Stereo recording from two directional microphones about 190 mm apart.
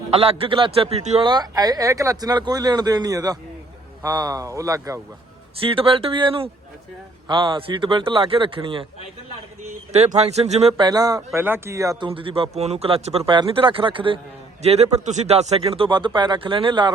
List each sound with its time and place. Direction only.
0.2 s speech: 30° right (ahead or behind)
1.3 s speech: 20° right (ahead or behind)
5.5 s speech: 30° right (ahead or behind)
9.9 s speech: 35° right (ahead or behind)